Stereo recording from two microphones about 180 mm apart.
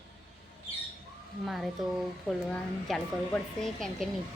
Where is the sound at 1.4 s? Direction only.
Centre (ahead or behind).